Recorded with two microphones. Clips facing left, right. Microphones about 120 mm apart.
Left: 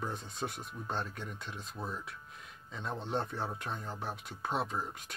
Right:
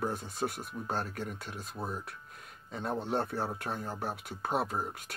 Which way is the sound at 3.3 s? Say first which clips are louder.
Right 3 dB; 5° right (ahead or behind).